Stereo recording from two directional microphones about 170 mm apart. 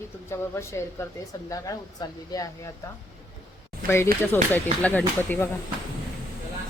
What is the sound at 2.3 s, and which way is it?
Speech, 20° left (ahead or behind).